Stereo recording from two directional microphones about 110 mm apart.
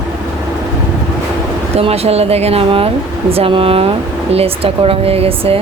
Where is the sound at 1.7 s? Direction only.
65° right (ahead or behind).